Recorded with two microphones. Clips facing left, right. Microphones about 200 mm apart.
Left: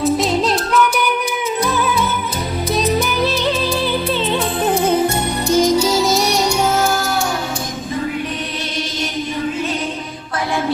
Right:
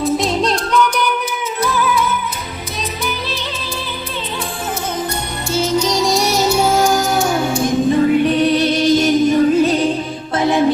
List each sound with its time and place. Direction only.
0.0 s music: centre (ahead or behind)
1.6 s music: 25° left (ahead or behind)
5.5 s music: 15° left (ahead or behind); by 7.0 s 15° right (ahead or behind)